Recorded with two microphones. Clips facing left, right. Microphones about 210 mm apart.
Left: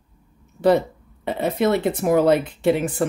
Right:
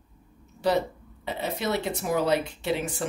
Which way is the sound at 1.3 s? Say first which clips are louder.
Left 9 dB; 55° left (ahead or behind).